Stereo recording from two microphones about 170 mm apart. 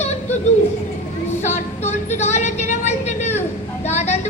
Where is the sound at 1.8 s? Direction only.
40° left (ahead or behind).